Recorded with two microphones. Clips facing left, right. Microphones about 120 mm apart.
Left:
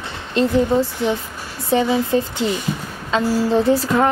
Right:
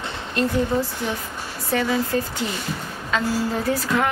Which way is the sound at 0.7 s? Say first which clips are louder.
Left 6 dB; 20° left (ahead or behind).